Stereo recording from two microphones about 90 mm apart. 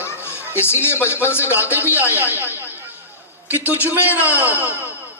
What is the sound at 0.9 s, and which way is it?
Speech, 25° left (ahead or behind).